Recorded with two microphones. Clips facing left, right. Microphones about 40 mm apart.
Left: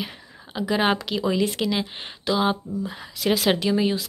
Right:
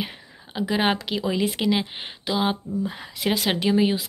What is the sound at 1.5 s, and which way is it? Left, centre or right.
A woman's voice, right.